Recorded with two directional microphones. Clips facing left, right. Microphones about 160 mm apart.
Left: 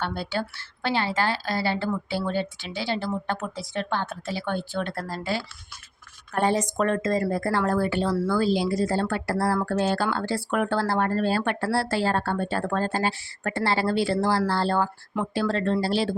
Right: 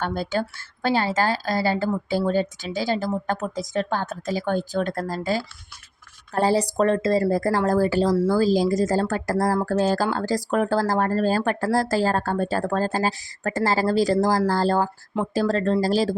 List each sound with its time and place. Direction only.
0.0 s a woman's voice: 45° right (ahead or behind)